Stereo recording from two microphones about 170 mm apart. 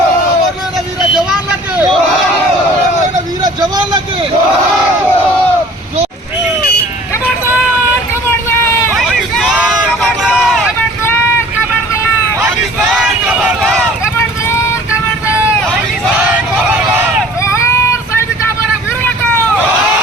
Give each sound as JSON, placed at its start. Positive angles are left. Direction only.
{"t": 1.1, "sound": "vehicle", "side_deg": -5}
{"t": 3.4, "sound": "vehicle", "side_deg": -25}
{"t": 9.0, "sound": "hubbub", "side_deg": 0}
{"t": 12.9, "sound": "vehicle", "side_deg": -5}
{"t": 17.4, "sound": "child singing", "side_deg": 15}